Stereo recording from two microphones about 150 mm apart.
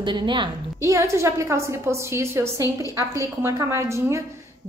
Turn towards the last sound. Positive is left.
turn(degrees=-20)  # may be behind; listen again after turning